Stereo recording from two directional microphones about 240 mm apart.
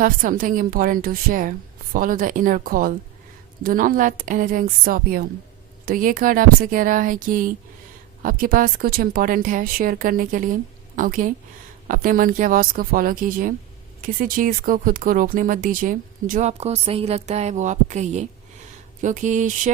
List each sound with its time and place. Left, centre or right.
0.0 s speech: right